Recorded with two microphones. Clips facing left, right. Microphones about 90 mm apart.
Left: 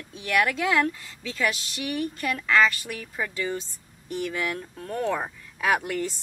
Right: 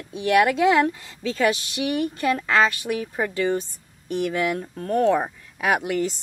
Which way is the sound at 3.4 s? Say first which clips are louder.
Right 8 dB; 55° right (ahead or behind).